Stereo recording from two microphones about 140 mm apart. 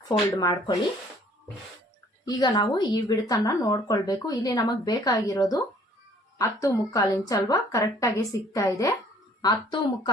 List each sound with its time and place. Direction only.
0.3 s speech: 30° left (ahead or behind)
2.2 s speech: 30° left (ahead or behind)